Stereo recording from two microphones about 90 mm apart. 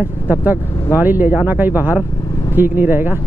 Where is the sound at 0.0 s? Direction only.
20° right (ahead or behind).